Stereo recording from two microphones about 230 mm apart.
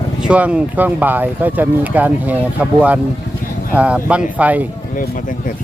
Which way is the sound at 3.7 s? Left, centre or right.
Centre.